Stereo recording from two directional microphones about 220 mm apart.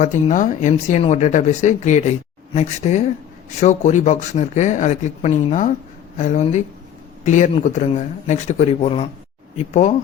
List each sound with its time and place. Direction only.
0.0 s speech: 35° left (ahead or behind)